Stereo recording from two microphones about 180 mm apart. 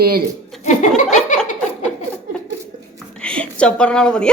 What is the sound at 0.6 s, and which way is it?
Chuckle, 40° left (ahead or behind).